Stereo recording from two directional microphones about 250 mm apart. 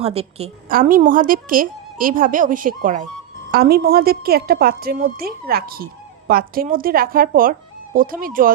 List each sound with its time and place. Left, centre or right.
0.0 s a woman's voice: right